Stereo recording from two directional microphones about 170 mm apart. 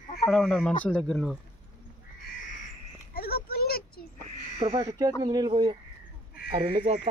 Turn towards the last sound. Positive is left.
turn(degrees=-35)  # may be behind; listen again after turning